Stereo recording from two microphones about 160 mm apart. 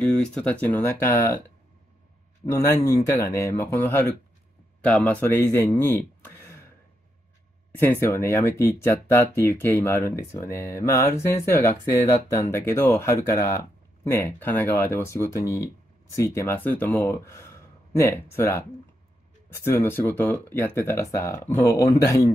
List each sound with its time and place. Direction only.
0.0 s speech: 5° left (ahead or behind)
2.6 s speech: 20° left (ahead or behind)
7.7 s speech: 15° left (ahead or behind)